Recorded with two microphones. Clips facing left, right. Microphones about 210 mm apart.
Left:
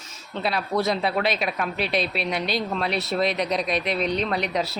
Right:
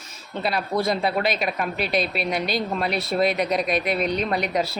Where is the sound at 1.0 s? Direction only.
Centre (ahead or behind).